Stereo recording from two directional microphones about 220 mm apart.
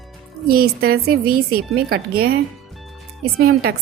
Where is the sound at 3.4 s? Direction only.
45° right (ahead or behind).